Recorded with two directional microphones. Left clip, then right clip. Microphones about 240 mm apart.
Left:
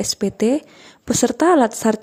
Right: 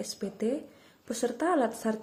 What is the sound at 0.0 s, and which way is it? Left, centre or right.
Speech, left.